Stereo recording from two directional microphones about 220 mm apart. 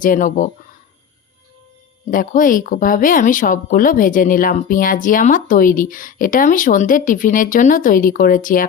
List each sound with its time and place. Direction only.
0.0 s speech: 35° left (ahead or behind)
2.0 s speech: 40° left (ahead or behind)